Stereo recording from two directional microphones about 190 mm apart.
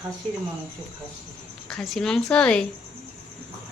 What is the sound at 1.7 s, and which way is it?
Speech, centre (ahead or behind).